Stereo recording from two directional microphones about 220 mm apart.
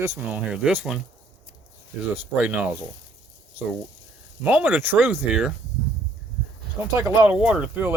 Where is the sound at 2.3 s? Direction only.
5° right (ahead or behind).